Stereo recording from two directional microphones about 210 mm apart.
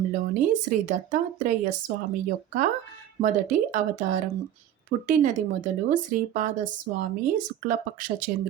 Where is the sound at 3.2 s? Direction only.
40° right (ahead or behind).